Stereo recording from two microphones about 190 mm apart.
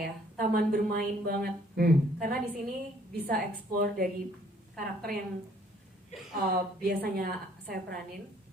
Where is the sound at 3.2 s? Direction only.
55° right (ahead or behind).